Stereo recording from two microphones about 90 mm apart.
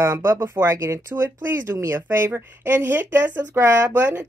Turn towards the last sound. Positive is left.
turn(degrees=-25)  # may be behind; listen again after turning